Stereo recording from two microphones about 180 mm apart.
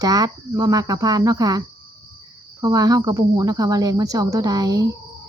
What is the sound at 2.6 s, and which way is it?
Speech, 20° right (ahead or behind).